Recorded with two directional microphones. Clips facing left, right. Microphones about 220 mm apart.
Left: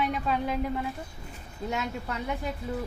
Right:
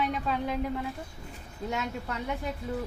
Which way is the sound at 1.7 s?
5° left (ahead or behind).